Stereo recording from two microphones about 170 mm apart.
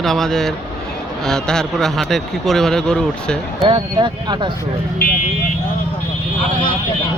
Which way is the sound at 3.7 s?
30° right (ahead or behind).